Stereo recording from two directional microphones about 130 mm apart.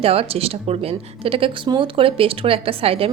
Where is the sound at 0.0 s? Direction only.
50° right (ahead or behind).